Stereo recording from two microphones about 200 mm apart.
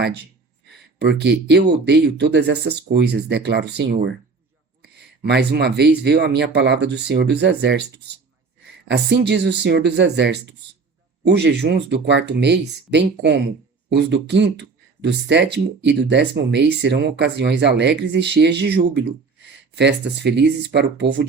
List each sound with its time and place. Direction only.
0.9 s speech: 60° right (ahead or behind)